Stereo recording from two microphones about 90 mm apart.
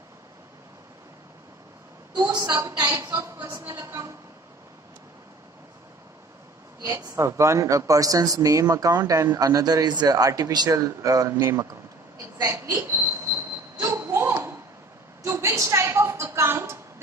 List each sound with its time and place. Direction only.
2.1 s a woman's voice: 50° right (ahead or behind)
2.6 s speech: 40° right (ahead or behind)
6.8 s speech: 40° right (ahead or behind)
12.4 s a sound: 35° right (ahead or behind)
15.2 s speech: 35° right (ahead or behind)